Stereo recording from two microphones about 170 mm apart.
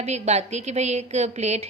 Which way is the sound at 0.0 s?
40° right (ahead or behind).